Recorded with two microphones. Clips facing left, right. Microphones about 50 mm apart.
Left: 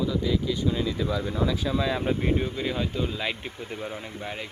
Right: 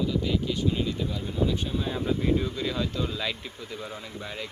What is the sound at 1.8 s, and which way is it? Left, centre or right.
Speech, left.